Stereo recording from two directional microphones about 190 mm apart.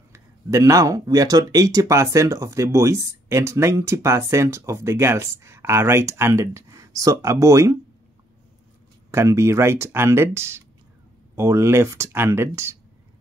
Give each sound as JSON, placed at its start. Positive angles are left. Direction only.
{"t": 0.1, "sound": "speech", "side_deg": -15}
{"t": 9.1, "sound": "speech", "side_deg": -15}